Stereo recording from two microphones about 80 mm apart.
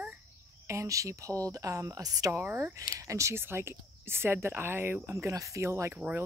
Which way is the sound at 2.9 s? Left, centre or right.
Right.